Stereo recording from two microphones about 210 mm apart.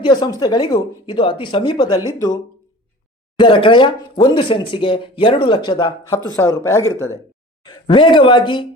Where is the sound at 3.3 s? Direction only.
25° left (ahead or behind).